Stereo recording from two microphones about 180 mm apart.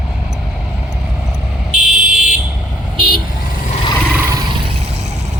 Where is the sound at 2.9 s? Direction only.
25° right (ahead or behind).